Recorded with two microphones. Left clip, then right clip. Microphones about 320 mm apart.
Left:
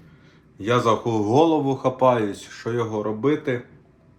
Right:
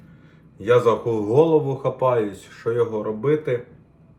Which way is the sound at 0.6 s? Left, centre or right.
Left.